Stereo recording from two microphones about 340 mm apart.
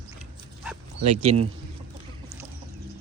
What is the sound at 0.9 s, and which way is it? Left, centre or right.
Speech, right.